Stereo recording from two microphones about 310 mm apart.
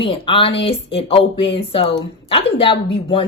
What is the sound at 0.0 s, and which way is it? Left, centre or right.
Speech, centre.